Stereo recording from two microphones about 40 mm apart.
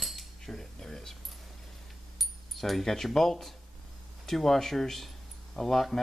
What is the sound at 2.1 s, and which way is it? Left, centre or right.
Speech, centre.